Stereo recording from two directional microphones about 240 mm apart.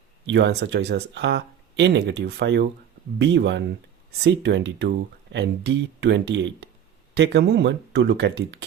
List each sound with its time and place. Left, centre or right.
0.3 s speech: right